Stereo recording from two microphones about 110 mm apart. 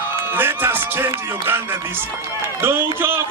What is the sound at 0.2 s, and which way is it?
A man's voice, 20° right (ahead or behind).